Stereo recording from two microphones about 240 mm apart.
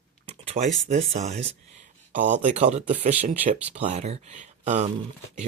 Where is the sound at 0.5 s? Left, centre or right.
Right.